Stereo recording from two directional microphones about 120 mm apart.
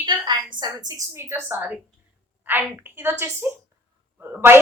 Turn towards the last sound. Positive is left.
turn(degrees=-15)  # may be behind; listen again after turning